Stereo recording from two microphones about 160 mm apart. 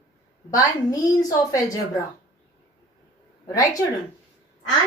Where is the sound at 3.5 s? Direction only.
20° left (ahead or behind).